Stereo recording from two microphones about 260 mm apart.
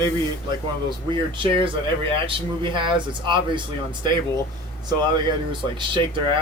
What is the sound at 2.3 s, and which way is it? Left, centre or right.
Speech, centre.